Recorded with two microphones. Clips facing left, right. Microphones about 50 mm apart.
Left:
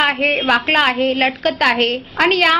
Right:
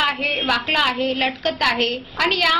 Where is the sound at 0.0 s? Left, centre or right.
Left.